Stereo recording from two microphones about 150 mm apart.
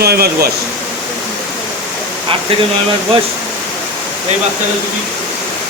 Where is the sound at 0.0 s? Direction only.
90° right.